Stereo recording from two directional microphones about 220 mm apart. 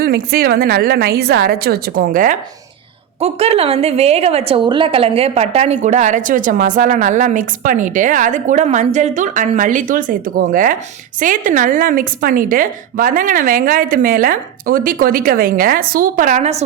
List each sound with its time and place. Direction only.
0.0 s a woman's voice: 45° right (ahead or behind)